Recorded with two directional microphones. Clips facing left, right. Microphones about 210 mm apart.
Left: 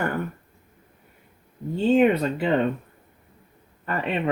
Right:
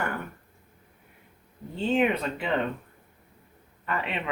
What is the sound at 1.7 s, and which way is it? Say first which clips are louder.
Speech: left 6 dB; 40° left (ahead or behind).